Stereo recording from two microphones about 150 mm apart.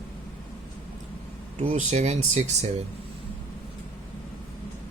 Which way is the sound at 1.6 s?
50° right (ahead or behind).